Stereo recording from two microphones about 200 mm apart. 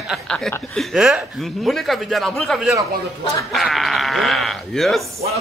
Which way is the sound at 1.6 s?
Centre (ahead or behind).